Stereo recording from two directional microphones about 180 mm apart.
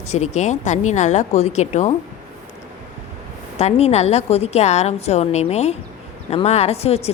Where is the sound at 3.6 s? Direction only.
35° left (ahead or behind).